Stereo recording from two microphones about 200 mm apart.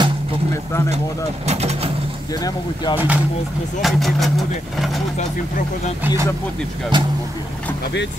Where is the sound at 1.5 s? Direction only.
30° right (ahead or behind).